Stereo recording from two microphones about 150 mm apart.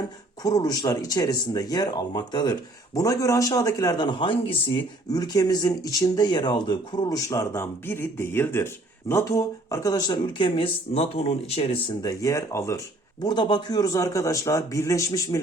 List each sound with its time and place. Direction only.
0.4 s speech: 25° left (ahead or behind)
12.0 s speech: 25° left (ahead or behind)